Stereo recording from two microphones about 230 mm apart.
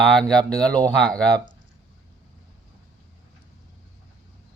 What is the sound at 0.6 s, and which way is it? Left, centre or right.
Speech, centre.